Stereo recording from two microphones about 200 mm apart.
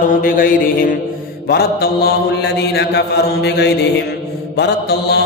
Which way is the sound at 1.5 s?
50° left (ahead or behind).